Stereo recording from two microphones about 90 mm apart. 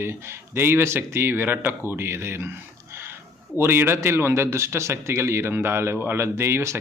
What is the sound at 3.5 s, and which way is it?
A man's voice, 25° right (ahead or behind).